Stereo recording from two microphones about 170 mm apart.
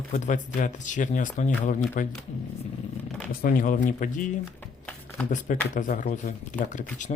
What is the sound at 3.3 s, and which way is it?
Speech, 60° left (ahead or behind).